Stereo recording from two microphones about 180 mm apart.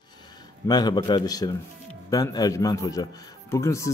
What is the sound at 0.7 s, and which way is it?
A man's voice, 25° left (ahead or behind).